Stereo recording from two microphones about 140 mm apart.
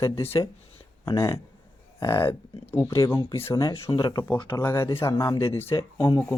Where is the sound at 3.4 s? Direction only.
25° left (ahead or behind).